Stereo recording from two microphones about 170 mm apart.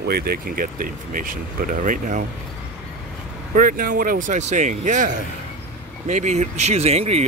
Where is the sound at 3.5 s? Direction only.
55° right (ahead or behind).